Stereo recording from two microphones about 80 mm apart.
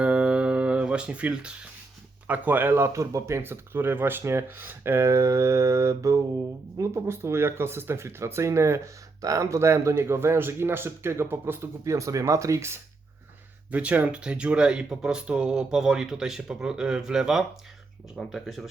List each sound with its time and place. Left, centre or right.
0.0 s music: centre
2.2 s speech: right
13.7 s speech: centre